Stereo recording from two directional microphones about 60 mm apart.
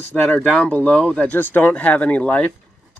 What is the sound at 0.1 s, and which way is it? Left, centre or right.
Speech, left.